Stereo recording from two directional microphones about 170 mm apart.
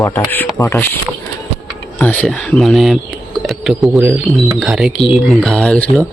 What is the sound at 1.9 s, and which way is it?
Speech, 10° left (ahead or behind).